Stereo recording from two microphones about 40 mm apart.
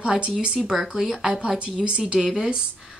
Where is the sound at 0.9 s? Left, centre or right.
Centre.